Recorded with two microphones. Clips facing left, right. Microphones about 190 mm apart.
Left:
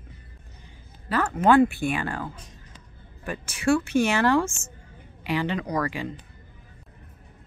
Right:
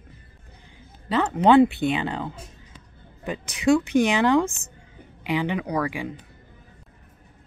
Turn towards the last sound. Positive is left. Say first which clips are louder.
# right 1 dB
turn(degrees=-10)  # may be behind; listen again after turning